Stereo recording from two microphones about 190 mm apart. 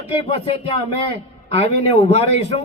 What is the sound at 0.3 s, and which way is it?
A man's voice, 30° left (ahead or behind).